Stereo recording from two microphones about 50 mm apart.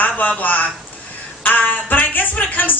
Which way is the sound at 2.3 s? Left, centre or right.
Left.